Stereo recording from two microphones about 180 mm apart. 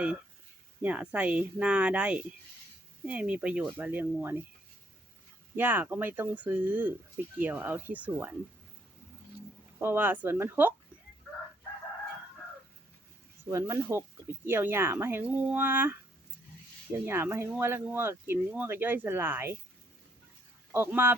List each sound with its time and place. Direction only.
0.8 s speech: 10° right (ahead or behind)
5.5 s speech: 10° right (ahead or behind)
9.7 s speech: 10° right (ahead or behind)
13.5 s speech: 15° right (ahead or behind)
17.1 s speech: 15° right (ahead or behind)
20.7 s speech: 10° right (ahead or behind)